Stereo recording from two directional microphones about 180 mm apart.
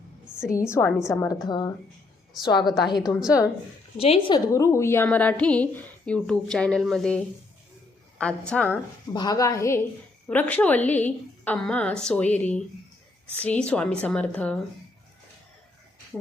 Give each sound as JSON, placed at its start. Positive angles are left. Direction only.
{"t": 0.6, "sound": "a woman's voice", "side_deg": 15}
{"t": 3.9, "sound": "speech", "side_deg": 35}
{"t": 4.5, "sound": "a woman's voice", "side_deg": 15}
{"t": 9.1, "sound": "a woman's voice", "side_deg": 20}